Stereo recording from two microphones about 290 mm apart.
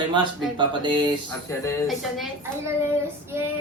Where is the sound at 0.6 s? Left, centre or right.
Centre.